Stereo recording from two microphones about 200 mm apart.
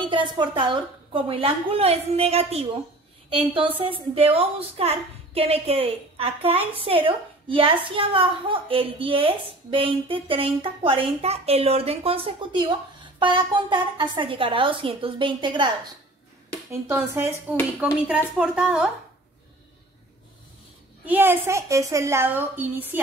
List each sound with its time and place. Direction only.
0.0 s a woman's voice: 25° right (ahead or behind)
16.8 s a woman's voice: 10° right (ahead or behind)
21.0 s a woman's voice: 10° right (ahead or behind)